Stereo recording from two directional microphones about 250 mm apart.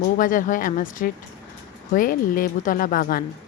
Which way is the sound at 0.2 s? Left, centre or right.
Left.